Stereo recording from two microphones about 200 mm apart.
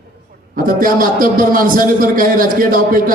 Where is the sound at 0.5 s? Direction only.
45° right (ahead or behind).